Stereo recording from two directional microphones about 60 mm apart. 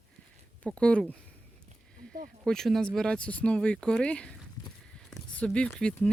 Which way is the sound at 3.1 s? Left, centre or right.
Centre.